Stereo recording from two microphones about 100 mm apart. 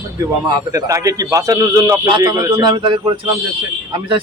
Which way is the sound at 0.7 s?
35° right (ahead or behind).